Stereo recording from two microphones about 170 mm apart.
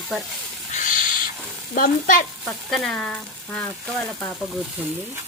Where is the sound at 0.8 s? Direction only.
50° left (ahead or behind).